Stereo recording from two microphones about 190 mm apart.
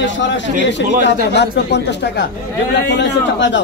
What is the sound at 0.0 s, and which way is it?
A man's voice, 70° left (ahead or behind).